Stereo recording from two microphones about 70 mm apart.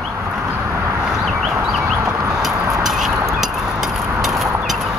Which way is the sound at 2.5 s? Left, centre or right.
Right.